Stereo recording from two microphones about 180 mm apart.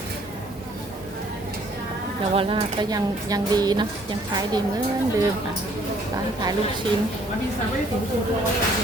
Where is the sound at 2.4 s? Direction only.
30° right (ahead or behind).